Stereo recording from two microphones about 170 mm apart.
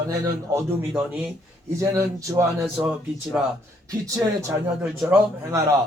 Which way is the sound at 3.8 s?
20° right (ahead or behind).